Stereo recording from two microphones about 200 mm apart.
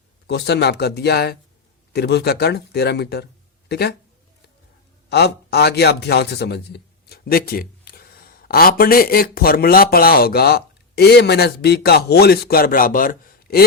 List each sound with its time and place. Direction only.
0.3 s speech: 55° left (ahead or behind)
5.0 s a man's voice: 55° left (ahead or behind)